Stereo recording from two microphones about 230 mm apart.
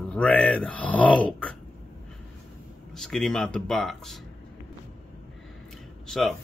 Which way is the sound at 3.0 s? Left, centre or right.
Centre.